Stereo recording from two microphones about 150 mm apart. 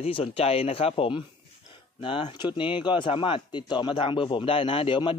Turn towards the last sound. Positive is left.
turn(degrees=35)  # may be behind; listen again after turning